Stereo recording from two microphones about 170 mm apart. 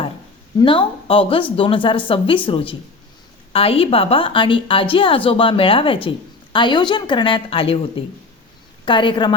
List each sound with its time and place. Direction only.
0.6 s a woman's voice: 30° left (ahead or behind)